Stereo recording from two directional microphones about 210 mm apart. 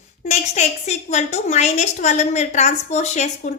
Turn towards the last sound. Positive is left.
turn(degrees=35)  # may be behind; listen again after turning